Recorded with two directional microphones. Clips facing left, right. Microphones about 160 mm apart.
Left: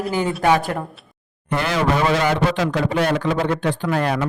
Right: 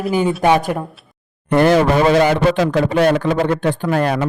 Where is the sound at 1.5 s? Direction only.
50° right (ahead or behind).